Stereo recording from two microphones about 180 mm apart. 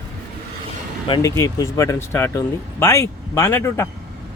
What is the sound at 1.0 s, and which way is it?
Speech, 25° left (ahead or behind).